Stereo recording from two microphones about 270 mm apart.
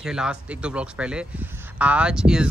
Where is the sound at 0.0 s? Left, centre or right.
Centre.